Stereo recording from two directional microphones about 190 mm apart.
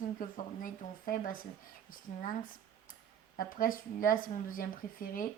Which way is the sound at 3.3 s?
45° left (ahead or behind).